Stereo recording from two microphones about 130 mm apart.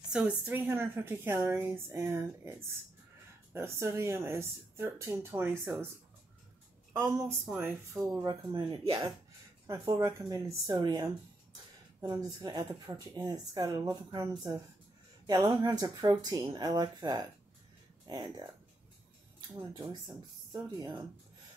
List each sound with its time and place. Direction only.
0.1 s a woman's voice: 5° right (ahead or behind)
3.5 s speech: 20° right (ahead or behind)
7.5 s speech: 20° right (ahead or behind)
9.7 s speech: 25° right (ahead or behind)
19.7 s speech: 35° right (ahead or behind)